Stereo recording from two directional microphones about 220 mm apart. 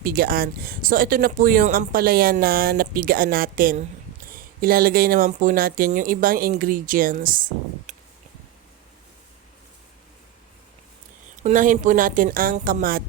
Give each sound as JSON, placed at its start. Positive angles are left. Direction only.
{"t": 0.0, "sound": "speech", "side_deg": -40}
{"t": 7.9, "sound": "a sound", "side_deg": -35}
{"t": 11.4, "sound": "speech", "side_deg": -35}